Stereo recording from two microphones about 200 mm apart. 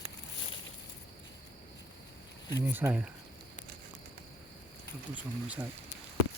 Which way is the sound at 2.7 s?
10° right (ahead or behind).